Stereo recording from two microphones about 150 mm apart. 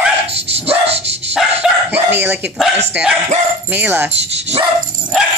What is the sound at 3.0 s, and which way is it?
Speech, 10° right (ahead or behind).